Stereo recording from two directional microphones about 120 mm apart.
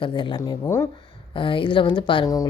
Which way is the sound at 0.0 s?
40° left (ahead or behind).